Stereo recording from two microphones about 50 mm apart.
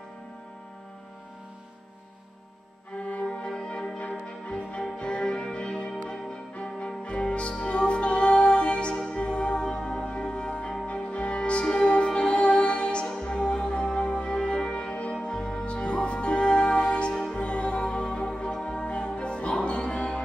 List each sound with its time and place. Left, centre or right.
3.0 s music: left